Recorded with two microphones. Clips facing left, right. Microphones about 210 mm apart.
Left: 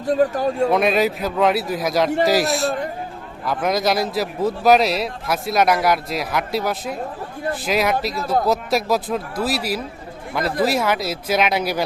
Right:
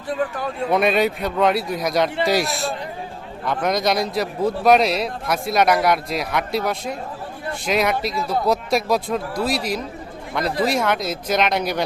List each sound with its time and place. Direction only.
0.0 s a man's voice: 40° left (ahead or behind)
0.7 s a man's voice: centre (ahead or behind)